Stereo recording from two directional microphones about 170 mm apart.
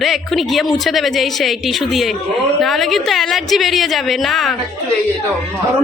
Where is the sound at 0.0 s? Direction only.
Centre (ahead or behind).